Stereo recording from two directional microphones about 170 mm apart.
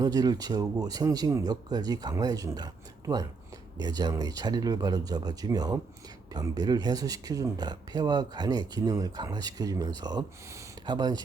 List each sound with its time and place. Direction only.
0.0 s speech: 20° right (ahead or behind)
3.8 s speech: 25° right (ahead or behind)